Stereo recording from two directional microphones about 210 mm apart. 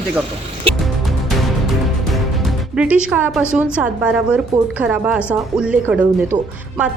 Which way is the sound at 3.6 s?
5° right (ahead or behind).